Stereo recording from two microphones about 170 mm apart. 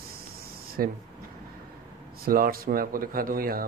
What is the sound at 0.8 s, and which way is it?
Speech, 60° right (ahead or behind).